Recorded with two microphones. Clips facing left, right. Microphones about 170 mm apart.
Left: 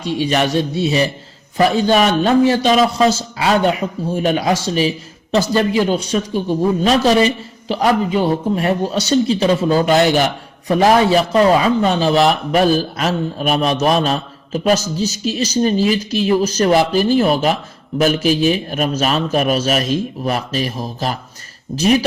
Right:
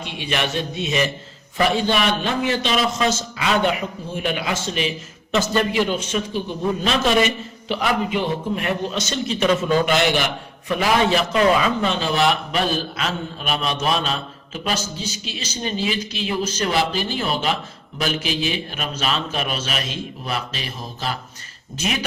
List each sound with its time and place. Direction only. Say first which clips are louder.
0.0 s a man's voice: left 8 dB; 40° left (ahead or behind)